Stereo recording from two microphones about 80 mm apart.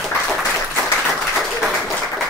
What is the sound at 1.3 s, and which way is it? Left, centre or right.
Applause, centre.